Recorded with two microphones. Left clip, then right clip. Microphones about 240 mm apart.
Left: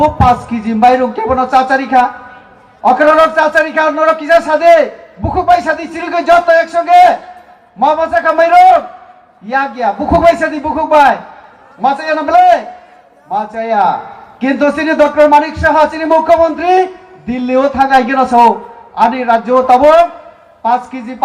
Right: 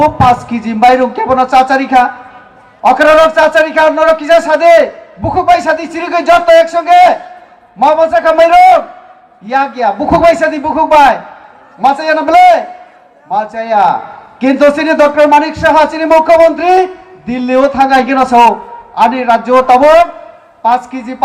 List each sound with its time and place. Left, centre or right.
0.0 s a man's voice: right